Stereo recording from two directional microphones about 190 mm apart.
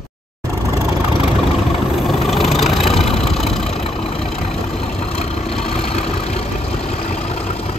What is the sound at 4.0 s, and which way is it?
Vehicle, 35° left (ahead or behind).